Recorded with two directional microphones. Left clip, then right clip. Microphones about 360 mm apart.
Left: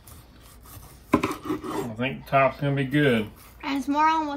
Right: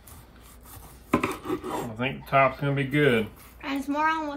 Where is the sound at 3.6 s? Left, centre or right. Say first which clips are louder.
Left 4 dB; centre.